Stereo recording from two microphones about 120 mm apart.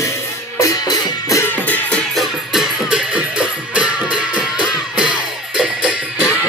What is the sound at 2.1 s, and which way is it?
Music, 5° right (ahead or behind).